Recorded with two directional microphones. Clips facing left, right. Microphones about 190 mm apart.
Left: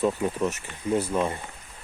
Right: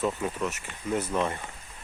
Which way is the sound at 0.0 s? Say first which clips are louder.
Left 4 dB; 15° left (ahead or behind).